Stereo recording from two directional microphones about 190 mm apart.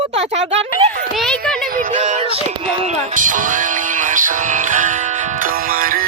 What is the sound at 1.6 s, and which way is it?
Speech, 45° right (ahead or behind).